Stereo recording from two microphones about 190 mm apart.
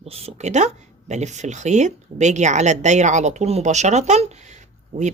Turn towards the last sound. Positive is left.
turn(degrees=-40)  # may be behind; listen again after turning